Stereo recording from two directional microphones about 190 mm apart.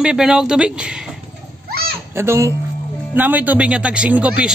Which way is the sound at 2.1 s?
15° right (ahead or behind).